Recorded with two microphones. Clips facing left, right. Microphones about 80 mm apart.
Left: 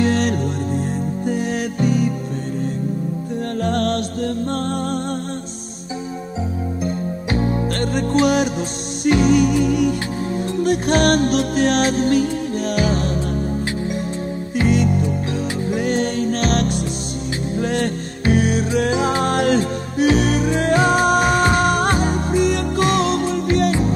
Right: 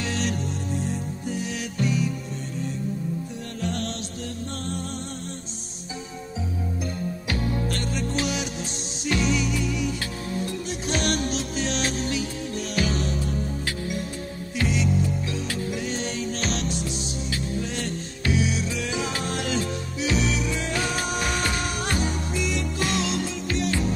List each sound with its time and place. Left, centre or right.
0.0 s music: left
3.6 s music: left
7.2 s music: left
7.8 s music: left
14.7 s music: left